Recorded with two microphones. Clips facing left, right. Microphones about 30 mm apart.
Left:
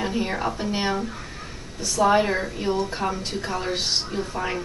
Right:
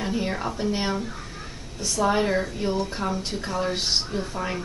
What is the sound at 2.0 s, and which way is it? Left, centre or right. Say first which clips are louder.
Speech: left 2 dB; centre.